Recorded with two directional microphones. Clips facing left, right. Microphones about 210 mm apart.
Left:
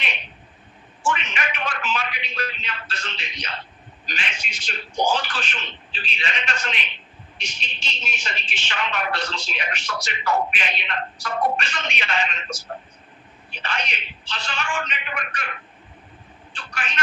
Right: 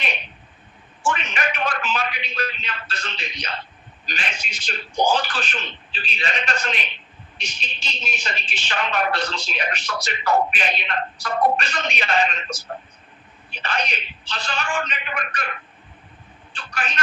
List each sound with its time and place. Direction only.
1.0 s speech: 40° right (ahead or behind)
16.7 s speech: 40° right (ahead or behind)